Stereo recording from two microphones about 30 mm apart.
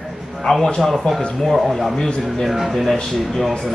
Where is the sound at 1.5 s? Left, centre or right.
Centre.